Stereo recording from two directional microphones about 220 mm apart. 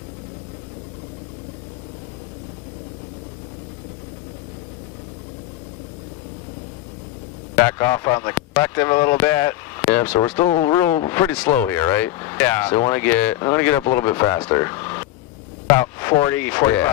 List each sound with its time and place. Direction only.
7.5 s speech: 10° left (ahead or behind)